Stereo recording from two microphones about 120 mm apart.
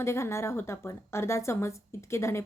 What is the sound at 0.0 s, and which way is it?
A woman's voice, 25° left (ahead or behind).